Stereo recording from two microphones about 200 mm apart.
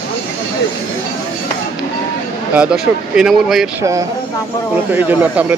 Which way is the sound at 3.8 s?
15° right (ahead or behind).